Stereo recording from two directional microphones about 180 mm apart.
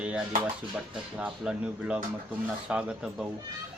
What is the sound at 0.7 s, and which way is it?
A man's voice, 5° right (ahead or behind).